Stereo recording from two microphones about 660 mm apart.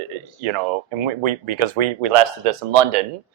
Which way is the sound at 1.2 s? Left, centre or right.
Right.